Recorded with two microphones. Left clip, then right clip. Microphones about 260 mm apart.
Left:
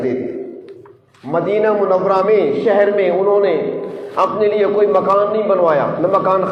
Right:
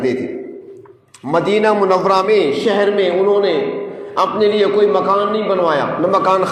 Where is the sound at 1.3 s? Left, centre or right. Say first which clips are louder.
Right 1 dB; right.